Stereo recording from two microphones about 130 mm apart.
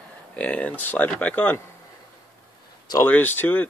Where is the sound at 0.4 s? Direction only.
10° left (ahead or behind).